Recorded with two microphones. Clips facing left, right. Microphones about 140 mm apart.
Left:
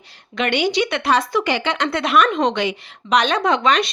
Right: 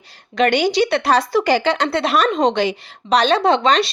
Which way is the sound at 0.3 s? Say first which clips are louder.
Right 4 dB; 40° right (ahead or behind).